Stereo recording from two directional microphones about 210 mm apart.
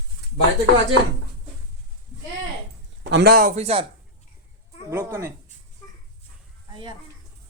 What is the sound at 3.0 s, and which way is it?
Speech, 50° right (ahead or behind).